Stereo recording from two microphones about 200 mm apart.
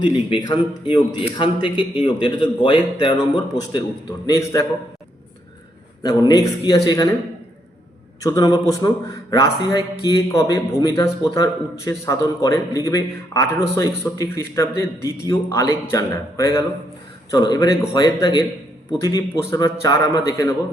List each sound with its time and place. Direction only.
0.4 s a man's voice: 20° left (ahead or behind)
6.0 s speech: 20° left (ahead or behind)
8.2 s a man's voice: 20° left (ahead or behind)